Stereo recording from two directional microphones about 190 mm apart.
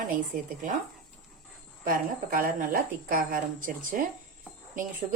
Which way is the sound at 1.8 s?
50° right (ahead or behind).